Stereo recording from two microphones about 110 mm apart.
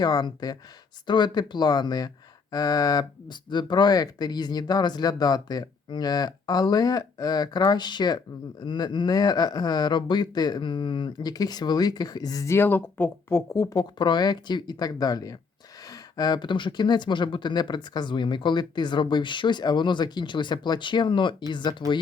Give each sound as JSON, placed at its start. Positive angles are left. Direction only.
{"t": 0.0, "sound": "speech", "side_deg": 40}
{"t": 14.0, "sound": "speech", "side_deg": 40}